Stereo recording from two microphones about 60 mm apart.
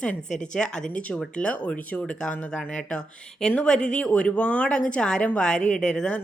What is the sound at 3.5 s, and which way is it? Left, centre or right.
Speech, centre.